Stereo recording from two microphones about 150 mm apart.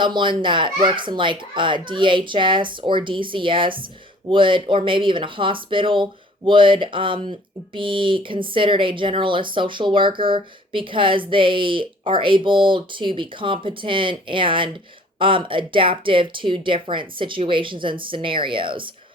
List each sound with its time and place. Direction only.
0.0 s speech: 30° right (ahead or behind)